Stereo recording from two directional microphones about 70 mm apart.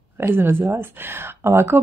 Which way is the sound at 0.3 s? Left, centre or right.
Right.